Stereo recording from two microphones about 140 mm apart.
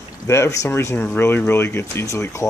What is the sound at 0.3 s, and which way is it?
Speech, 20° left (ahead or behind).